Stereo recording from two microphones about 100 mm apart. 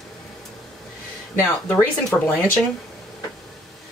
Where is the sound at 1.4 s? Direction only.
25° left (ahead or behind).